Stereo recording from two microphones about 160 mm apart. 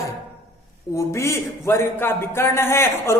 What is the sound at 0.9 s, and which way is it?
A man's voice, 20° left (ahead or behind).